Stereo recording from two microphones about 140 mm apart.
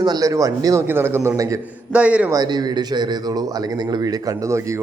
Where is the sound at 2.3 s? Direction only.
30° right (ahead or behind).